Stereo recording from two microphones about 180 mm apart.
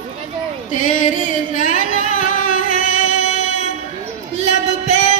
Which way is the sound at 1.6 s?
45° left (ahead or behind).